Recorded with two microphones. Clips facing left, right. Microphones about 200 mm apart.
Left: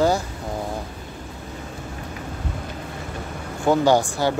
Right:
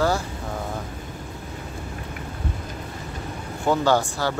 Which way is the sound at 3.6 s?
15° left (ahead or behind).